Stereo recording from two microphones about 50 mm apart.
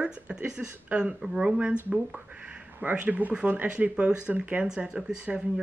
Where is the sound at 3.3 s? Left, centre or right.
Centre.